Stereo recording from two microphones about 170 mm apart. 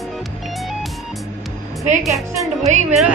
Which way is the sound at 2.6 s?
40° right (ahead or behind).